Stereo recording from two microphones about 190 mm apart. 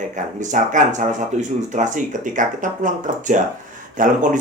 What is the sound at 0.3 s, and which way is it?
Speech, 40° right (ahead or behind).